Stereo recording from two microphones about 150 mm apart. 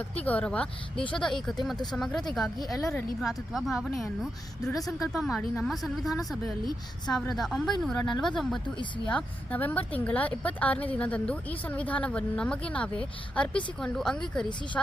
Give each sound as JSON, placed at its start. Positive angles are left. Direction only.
{"t": 0.2, "sound": "a woman's voice", "side_deg": 10}
{"t": 7.3, "sound": "a woman's voice", "side_deg": 0}